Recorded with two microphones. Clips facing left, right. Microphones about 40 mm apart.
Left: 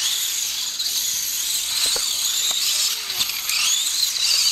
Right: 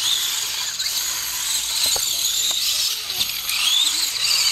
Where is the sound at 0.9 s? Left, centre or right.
Right.